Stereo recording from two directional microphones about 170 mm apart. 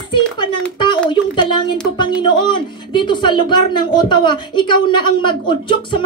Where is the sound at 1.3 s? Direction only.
25° left (ahead or behind).